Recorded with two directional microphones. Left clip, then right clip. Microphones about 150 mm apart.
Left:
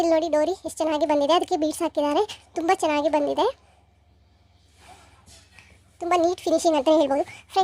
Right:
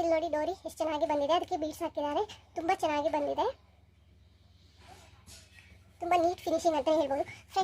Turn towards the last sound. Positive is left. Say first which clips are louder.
# left 8 dB
turn(degrees=40)  # may be behind; listen again after turning